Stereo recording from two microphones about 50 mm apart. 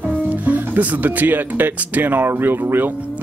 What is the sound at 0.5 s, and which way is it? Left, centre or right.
Speech, right.